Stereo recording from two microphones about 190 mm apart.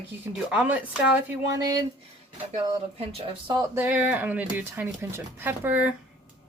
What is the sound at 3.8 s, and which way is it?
Speech, 10° right (ahead or behind).